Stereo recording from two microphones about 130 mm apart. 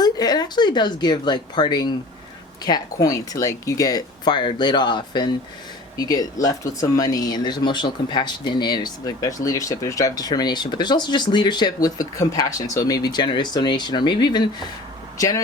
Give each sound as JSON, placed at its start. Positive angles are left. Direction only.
{"t": 0.0, "sound": "speech", "side_deg": 30}